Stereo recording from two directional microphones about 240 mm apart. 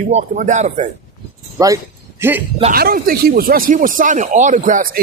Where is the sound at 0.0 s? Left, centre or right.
Right.